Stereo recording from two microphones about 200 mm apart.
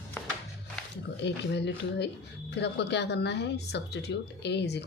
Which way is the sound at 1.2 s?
60° left (ahead or behind).